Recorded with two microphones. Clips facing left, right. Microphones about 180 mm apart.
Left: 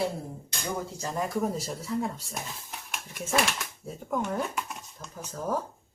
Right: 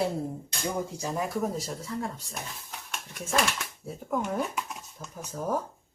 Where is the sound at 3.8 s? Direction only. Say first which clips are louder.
Even; centre (ahead or behind).